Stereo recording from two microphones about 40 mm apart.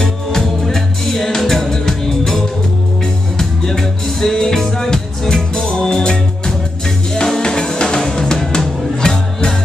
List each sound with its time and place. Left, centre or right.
0.0 s music: centre
7.2 s drum: centre
8.5 s music: left